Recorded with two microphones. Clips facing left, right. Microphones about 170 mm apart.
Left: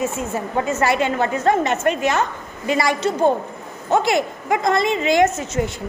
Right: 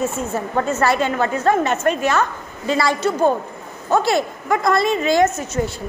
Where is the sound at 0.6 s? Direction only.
15° left (ahead or behind).